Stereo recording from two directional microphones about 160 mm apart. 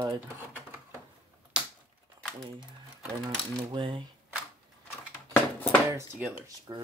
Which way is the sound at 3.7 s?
30° right (ahead or behind).